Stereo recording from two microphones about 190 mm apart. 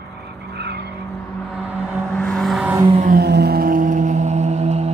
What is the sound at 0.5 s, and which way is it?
Vehicle, 60° right (ahead or behind).